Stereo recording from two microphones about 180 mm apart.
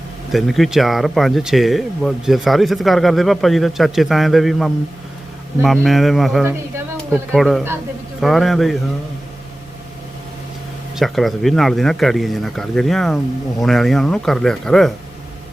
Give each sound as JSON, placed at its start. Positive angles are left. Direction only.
{"t": 0.3, "sound": "speech", "side_deg": 0}
{"t": 6.4, "sound": "a sound", "side_deg": -10}
{"t": 7.3, "sound": "speech", "side_deg": 0}
{"t": 10.9, "sound": "speech", "side_deg": 0}